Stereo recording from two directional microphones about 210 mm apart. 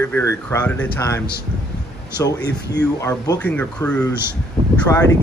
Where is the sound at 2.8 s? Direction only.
15° left (ahead or behind).